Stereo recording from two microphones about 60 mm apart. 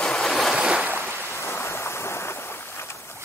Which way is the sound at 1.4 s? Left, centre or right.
Left.